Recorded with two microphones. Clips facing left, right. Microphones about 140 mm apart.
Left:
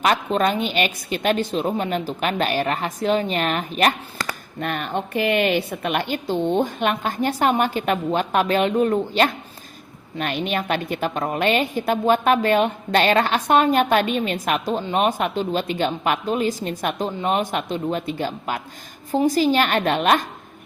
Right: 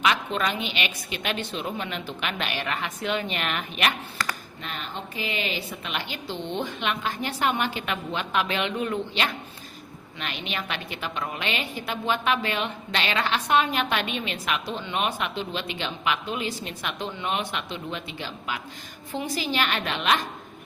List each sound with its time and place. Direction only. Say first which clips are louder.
0.0 s a woman's voice: left 6 dB; 40° left (ahead or behind)
4.6 s a woman's voice: left 10 dB; 55° left (ahead or behind)